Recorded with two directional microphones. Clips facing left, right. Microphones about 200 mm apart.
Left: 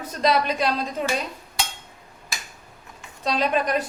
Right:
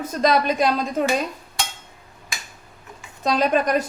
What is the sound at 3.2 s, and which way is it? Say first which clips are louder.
Speech: right 3 dB; 45° right (ahead or behind).